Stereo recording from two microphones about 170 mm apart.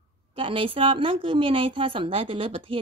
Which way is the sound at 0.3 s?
30° right (ahead or behind).